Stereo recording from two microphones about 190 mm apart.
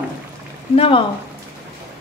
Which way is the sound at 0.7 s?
30° left (ahead or behind).